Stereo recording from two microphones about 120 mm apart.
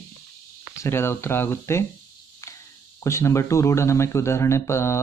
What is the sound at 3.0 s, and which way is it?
Speech, 25° left (ahead or behind).